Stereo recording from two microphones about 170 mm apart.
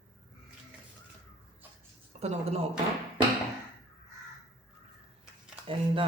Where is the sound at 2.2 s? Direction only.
40° right (ahead or behind).